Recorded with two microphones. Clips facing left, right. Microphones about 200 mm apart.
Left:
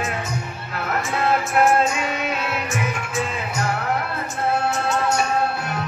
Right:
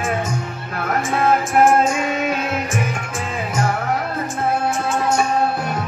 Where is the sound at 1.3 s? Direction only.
50° right (ahead or behind).